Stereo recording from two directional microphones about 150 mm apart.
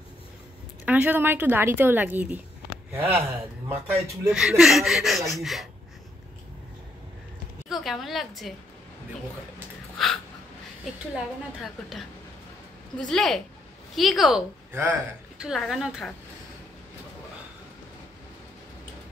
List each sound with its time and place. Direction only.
0.8 s a woman's voice: 10° right (ahead or behind)
4.3 s speech: 5° right (ahead or behind)
7.7 s speech: centre (ahead or behind)
12.9 s speech: 5° left (ahead or behind)
14.7 s speech: 15° right (ahead or behind)